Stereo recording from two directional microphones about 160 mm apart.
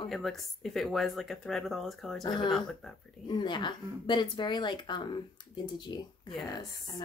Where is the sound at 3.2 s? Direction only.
25° left (ahead or behind).